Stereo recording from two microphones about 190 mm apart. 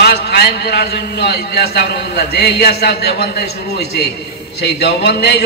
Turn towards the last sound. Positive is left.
turn(degrees=60)  # may be behind; listen again after turning